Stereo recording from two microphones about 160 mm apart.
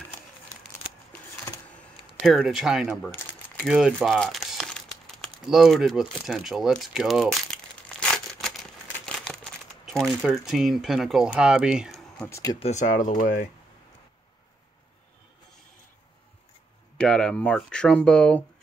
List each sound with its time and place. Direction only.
1.8 s speech: centre (ahead or behind)
3.6 s crumpling: centre (ahead or behind)
12.3 s speech: 20° left (ahead or behind)
12.5 s speech: 45° left (ahead or behind)
17.0 s speech: 5° left (ahead or behind)